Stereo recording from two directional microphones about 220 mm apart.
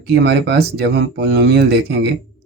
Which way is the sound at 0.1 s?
50° right (ahead or behind).